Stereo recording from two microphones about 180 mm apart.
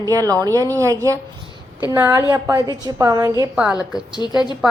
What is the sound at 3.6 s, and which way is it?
Speech, 5° right (ahead or behind).